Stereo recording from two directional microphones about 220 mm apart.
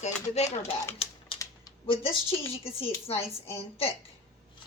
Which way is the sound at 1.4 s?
20° left (ahead or behind).